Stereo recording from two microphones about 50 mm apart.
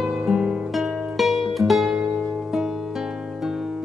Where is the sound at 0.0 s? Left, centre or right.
Centre.